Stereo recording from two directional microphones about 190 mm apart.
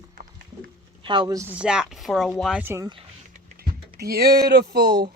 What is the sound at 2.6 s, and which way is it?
Speech, 10° right (ahead or behind).